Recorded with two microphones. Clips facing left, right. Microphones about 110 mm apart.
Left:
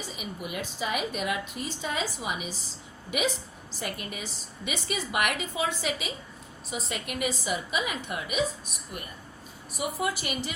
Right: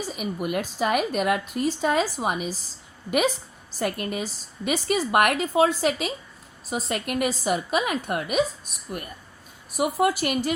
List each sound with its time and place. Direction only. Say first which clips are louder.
0.3 s a woman's voice: right 8 dB; 55° right (ahead or behind)